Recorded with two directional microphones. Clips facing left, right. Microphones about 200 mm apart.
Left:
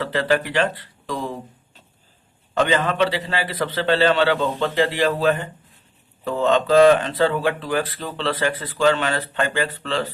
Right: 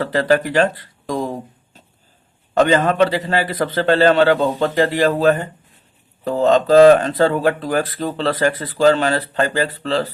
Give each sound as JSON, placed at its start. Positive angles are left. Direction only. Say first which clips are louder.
{"t": 0.0, "sound": "speech", "louder": "right 4 dB", "side_deg": -40}
{"t": 2.6, "sound": "a man's voice", "louder": "right 5 dB", "side_deg": -45}